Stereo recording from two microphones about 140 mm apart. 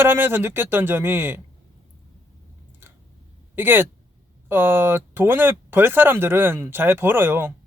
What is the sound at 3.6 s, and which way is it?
Speech, 15° right (ahead or behind).